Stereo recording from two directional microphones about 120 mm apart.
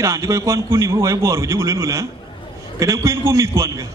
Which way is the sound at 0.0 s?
25° right (ahead or behind).